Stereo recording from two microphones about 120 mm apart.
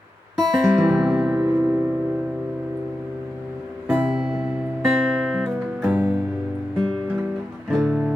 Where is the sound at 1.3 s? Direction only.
20° right (ahead or behind).